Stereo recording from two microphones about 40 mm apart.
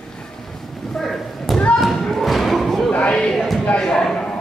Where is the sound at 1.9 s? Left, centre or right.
Centre.